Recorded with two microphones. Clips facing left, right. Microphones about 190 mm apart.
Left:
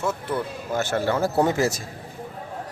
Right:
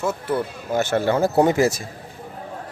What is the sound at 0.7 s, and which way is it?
Speech, 20° right (ahead or behind).